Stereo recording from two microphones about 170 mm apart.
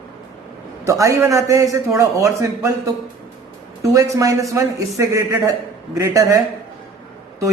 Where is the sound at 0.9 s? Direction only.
20° right (ahead or behind).